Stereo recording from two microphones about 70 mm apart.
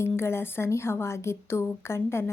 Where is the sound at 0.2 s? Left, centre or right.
Left.